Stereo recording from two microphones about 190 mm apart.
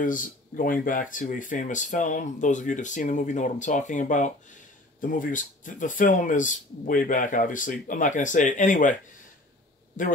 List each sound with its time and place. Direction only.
0.0 s speech: 45° left (ahead or behind)